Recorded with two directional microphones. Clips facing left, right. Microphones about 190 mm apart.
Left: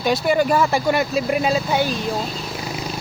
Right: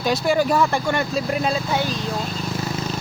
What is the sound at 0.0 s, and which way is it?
Speech, centre (ahead or behind).